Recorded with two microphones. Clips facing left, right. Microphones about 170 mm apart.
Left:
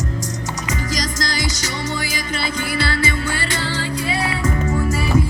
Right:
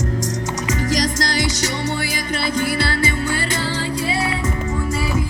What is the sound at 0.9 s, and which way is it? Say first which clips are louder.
Music: right 6 dB; 70° right (ahead or behind).